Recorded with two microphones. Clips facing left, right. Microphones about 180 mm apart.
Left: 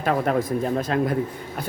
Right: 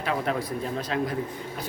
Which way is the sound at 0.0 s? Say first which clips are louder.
Left 6 dB; 50° left (ahead or behind).